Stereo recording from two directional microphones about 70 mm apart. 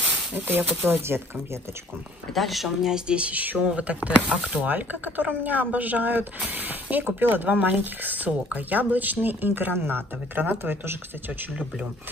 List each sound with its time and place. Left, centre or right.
0.3 s speech: right
2.3 s speech: centre; by 11.3 s right